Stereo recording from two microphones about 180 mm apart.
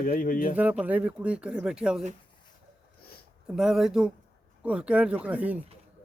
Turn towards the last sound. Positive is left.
turn(degrees=-10)  # may be behind; listen again after turning